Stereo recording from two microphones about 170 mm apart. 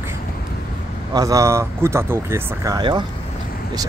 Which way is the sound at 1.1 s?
20° right (ahead or behind).